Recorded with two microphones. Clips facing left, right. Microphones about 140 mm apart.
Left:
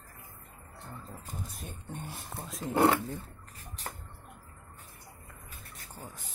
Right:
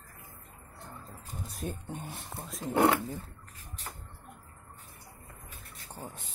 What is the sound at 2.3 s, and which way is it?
Speech, centre (ahead or behind).